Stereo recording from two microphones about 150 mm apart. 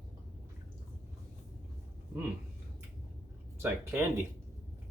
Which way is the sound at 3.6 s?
15° right (ahead or behind).